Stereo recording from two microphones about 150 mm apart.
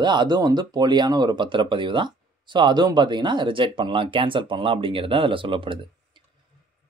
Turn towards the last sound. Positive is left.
turn(degrees=-35)  # may be behind; listen again after turning